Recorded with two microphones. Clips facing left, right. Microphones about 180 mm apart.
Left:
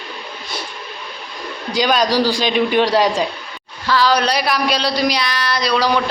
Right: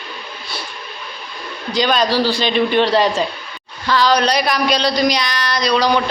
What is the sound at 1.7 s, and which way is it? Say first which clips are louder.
A man's voice: even; 10° left (ahead or behind).